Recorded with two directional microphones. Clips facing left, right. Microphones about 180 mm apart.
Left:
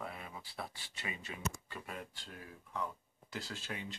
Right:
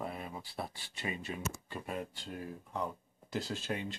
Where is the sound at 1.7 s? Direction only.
20° right (ahead or behind).